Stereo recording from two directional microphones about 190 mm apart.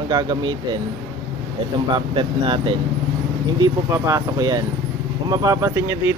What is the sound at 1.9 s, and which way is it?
Speech, 25° right (ahead or behind).